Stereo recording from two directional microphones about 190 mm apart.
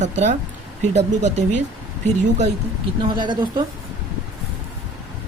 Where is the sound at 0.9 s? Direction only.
35° right (ahead or behind).